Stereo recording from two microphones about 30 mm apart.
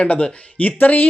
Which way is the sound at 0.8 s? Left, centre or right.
Left.